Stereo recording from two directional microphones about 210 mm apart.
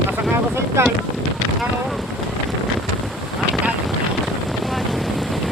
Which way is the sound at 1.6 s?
Centre (ahead or behind).